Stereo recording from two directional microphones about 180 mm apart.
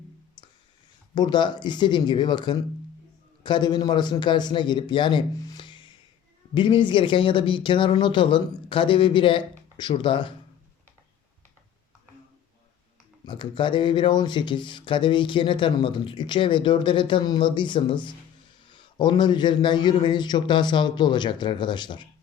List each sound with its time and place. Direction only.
1.1 s speech: 25° left (ahead or behind)
13.2 s speech: 25° left (ahead or behind)